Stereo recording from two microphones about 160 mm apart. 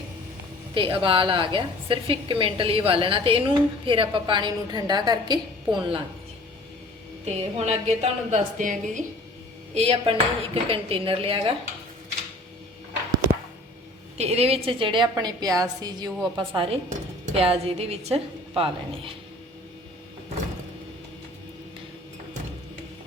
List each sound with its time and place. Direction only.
0.7 s a woman's voice: 30° right (ahead or behind)
7.3 s a woman's voice: 45° right (ahead or behind)
9.7 s a woman's voice: 35° right (ahead or behind)
14.2 s a woman's voice: 40° right (ahead or behind); by 16.6 s 25° right (ahead or behind)
17.3 s a woman's voice: 35° right (ahead or behind)